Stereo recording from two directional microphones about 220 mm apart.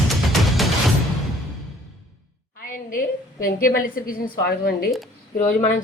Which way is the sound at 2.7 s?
40° left (ahead or behind).